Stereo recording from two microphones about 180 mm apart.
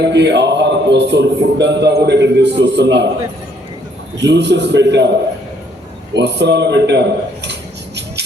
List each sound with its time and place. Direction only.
0.0 s a man's voice: 70° right (ahead or behind)
4.2 s a man's voice: 70° right (ahead or behind)
6.1 s a man's voice: 70° right (ahead or behind)